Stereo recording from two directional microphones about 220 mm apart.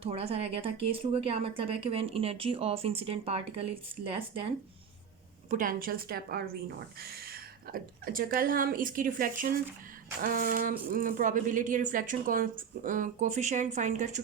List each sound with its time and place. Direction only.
0.0 s speech: 25° right (ahead or behind)
5.5 s a woman's voice: 40° right (ahead or behind)